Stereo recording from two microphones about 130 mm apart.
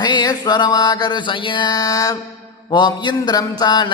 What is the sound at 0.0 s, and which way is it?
Mantra, 30° left (ahead or behind).